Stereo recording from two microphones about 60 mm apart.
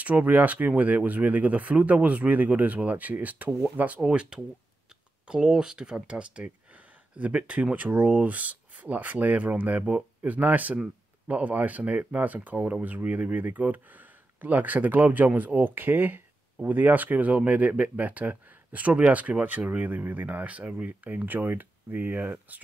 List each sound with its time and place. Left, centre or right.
0.0 s speech: right
4.0 s speech: centre; by 22.3 s right